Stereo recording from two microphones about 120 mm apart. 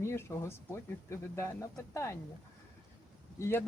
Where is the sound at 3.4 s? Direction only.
20° left (ahead or behind).